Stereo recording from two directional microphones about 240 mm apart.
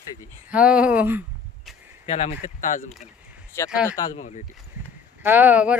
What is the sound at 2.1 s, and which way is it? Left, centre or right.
Speech, left.